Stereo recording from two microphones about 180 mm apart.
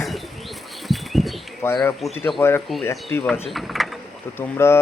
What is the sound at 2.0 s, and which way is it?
Speech, centre (ahead or behind).